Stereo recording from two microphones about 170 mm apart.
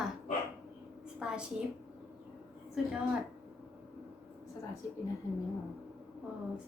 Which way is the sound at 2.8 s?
5° right (ahead or behind).